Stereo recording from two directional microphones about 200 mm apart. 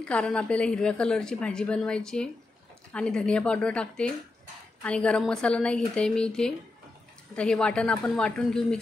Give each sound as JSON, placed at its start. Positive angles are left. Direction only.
{"t": 0.0, "sound": "a woman's voice", "side_deg": 5}